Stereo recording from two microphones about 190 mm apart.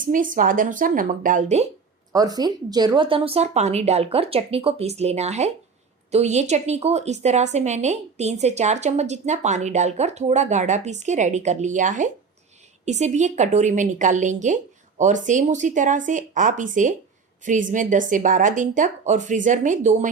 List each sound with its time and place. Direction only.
0.0 s a woman's voice: 45° right (ahead or behind)
2.1 s a woman's voice: 20° right (ahead or behind); by 20.1 s 40° right (ahead or behind)